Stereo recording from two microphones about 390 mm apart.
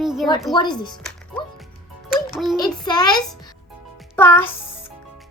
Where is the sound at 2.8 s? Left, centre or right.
Centre.